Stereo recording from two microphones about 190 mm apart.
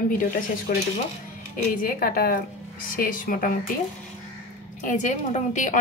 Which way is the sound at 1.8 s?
50° left (ahead or behind).